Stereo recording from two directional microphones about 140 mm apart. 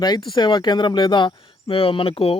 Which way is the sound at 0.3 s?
35° left (ahead or behind).